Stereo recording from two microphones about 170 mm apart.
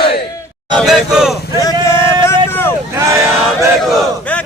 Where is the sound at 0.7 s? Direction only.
Centre (ahead or behind).